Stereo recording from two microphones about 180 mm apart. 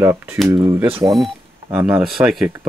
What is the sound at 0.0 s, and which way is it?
Speech, 15° right (ahead or behind).